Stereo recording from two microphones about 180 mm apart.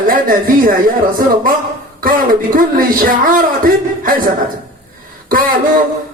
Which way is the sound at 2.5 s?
50° right (ahead or behind).